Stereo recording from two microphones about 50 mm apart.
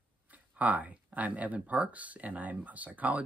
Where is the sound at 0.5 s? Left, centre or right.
Right.